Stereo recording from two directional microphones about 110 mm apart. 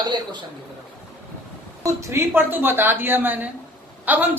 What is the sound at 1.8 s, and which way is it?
A woman's voice, 30° right (ahead or behind).